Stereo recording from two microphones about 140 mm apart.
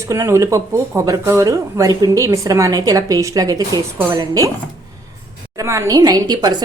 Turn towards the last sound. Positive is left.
turn(degrees=-30)  # may be behind; listen again after turning